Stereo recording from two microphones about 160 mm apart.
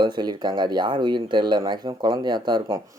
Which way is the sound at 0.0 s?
25° right (ahead or behind).